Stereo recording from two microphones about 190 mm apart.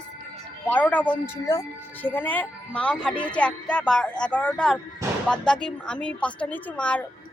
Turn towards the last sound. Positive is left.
turn(degrees=5)  # may be behind; listen again after turning